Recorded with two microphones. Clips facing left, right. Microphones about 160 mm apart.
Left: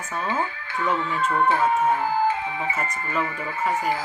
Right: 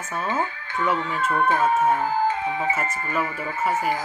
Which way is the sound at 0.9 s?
15° right (ahead or behind).